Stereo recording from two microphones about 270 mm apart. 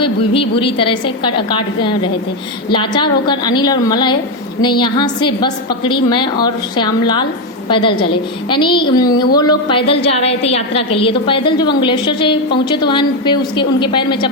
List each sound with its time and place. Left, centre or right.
0.0 s a woman's voice: centre